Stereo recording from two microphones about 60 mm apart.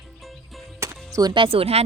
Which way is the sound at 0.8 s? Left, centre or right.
Right.